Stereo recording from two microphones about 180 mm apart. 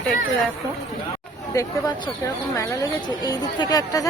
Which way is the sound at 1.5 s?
15° left (ahead or behind).